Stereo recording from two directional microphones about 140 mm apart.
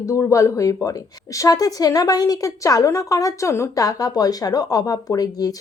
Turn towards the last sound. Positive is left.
turn(degrees=25)  # may be behind; listen again after turning